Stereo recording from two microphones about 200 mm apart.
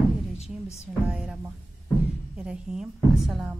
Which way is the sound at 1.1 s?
5° right (ahead or behind).